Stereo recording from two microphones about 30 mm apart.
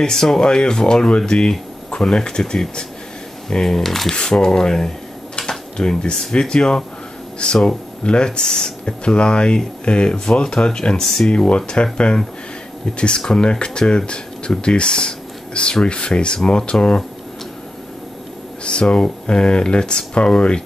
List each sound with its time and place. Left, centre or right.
0.0 s speech: centre
0.5 s speech: left
3.6 s speech: centre
4.1 s speech: left
5.5 s a sound: left
6.5 s speech: left
11.0 s speech: centre
11.2 s speech: left
18.6 s speech: left